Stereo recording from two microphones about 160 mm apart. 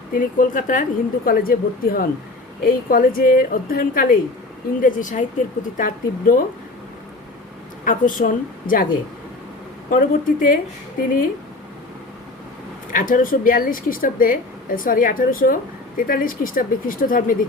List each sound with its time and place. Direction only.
0.1 s speech: 55° left (ahead or behind)
7.9 s speech: 55° left (ahead or behind)
9.9 s speech: 60° left (ahead or behind)
12.9 s speech: 55° left (ahead or behind)